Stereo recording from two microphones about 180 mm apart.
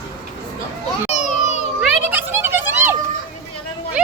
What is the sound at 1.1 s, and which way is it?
Children playing, 40° left (ahead or behind).